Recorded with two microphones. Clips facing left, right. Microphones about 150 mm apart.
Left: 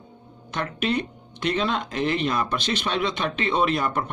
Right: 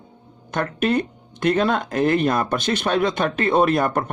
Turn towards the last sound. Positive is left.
turn(degrees=-50)  # may be behind; listen again after turning